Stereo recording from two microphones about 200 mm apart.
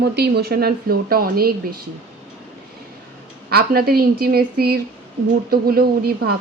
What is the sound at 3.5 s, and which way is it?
Speech, 50° right (ahead or behind).